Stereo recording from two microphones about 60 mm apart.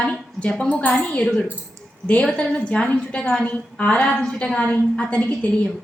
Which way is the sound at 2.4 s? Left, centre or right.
Centre.